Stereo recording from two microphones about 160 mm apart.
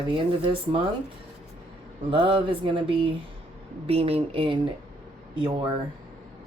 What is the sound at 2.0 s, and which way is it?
Speech, 35° right (ahead or behind).